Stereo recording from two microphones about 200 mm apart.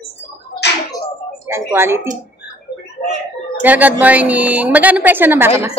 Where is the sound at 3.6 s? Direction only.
10° right (ahead or behind).